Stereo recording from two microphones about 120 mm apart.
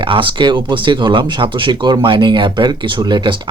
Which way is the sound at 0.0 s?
45° right (ahead or behind).